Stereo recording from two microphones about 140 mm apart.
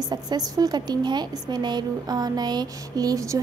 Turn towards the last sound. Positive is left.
turn(degrees=-25)  # may be behind; listen again after turning